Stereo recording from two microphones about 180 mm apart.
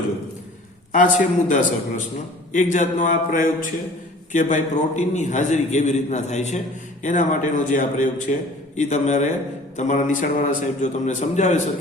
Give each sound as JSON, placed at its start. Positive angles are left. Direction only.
{"t": 0.9, "sound": "a man's voice", "side_deg": 45}